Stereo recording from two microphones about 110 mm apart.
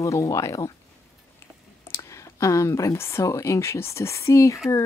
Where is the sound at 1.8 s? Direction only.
25° left (ahead or behind).